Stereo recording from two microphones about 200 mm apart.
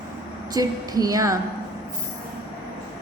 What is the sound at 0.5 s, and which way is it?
Speech, 20° right (ahead or behind).